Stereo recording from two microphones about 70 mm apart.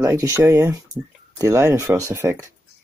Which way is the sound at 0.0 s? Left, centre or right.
Right.